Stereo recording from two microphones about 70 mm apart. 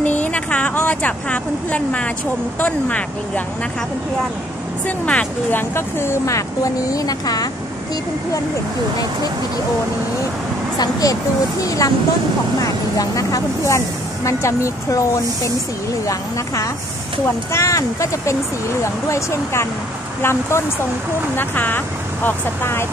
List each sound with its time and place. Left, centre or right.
0.0 s a sound: left
2.6 s speech: left
4.8 s speech: left
5.6 s speech: left
10.8 s speech: left
17.5 s speech: left